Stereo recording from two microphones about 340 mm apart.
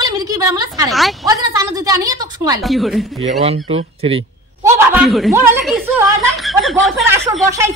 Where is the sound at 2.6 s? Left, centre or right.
Centre.